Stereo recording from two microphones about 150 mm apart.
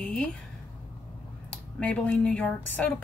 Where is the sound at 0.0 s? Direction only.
5° left (ahead or behind).